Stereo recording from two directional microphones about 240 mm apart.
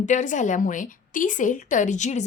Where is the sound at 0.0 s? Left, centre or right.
Left.